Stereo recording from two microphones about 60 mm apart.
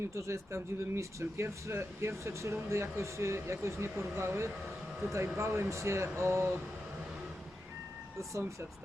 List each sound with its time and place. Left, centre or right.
0.1 s speech: right
8.3 s speech: right